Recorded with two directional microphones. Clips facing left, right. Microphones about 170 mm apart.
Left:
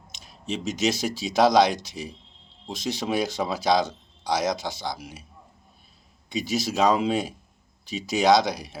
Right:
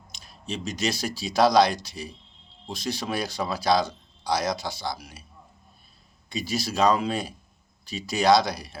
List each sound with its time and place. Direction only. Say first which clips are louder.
0.2 s speech: left 3 dB; 20° left (ahead or behind)
6.2 s speech: left 3 dB; 20° left (ahead or behind)